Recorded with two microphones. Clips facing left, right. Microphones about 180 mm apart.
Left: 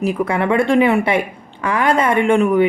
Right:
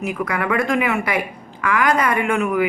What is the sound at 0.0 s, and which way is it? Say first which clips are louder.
Speech: left 5 dB; 30° left (ahead or behind).